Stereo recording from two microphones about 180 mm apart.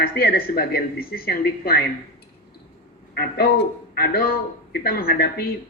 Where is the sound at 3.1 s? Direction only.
60° left (ahead or behind).